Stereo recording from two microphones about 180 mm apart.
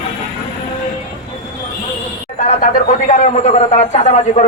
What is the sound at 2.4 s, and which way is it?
A man's voice, 45° left (ahead or behind).